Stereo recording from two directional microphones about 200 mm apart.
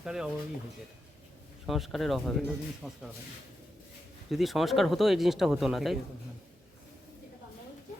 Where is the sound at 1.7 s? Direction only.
Centre (ahead or behind).